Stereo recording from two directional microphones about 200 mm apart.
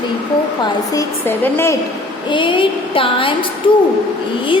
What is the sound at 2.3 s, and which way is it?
A woman's voice, 25° left (ahead or behind).